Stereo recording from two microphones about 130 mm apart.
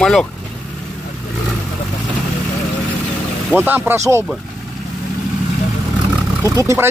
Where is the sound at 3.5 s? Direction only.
15° right (ahead or behind).